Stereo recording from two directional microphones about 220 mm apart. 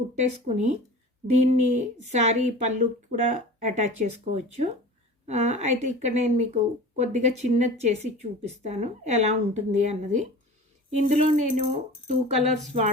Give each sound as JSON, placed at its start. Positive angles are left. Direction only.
{"t": 0.2, "sound": "speech", "side_deg": -30}